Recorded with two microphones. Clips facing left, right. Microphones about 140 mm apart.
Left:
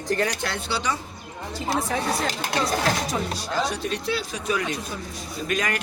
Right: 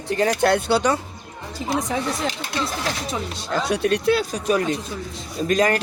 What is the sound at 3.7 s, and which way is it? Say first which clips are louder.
Speech: right 8 dB; 60° right (ahead or behind).